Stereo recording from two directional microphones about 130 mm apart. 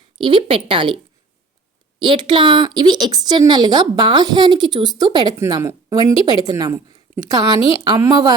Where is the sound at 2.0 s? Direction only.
40° right (ahead or behind).